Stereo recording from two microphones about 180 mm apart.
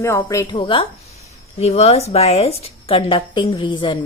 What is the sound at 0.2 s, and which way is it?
A woman's voice, 20° left (ahead or behind).